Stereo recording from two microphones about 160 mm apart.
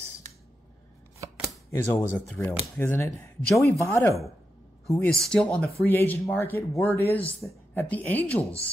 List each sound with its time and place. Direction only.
1.7 s speech: 15° left (ahead or behind)
5.1 s speech: 5° left (ahead or behind)